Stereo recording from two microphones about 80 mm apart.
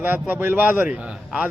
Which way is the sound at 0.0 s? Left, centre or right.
Right.